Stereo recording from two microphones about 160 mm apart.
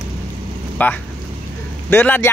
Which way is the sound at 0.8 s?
10° left (ahead or behind).